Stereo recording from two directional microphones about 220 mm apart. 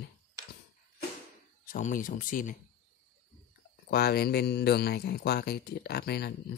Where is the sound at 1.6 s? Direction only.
35° left (ahead or behind).